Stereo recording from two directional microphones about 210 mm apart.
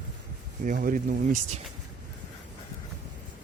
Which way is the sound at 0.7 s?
40° right (ahead or behind).